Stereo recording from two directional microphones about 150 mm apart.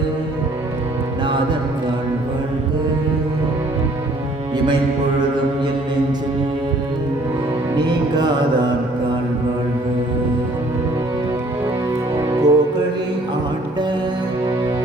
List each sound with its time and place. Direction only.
7.9 s music: 30° right (ahead or behind)
12.1 s music: 25° right (ahead or behind)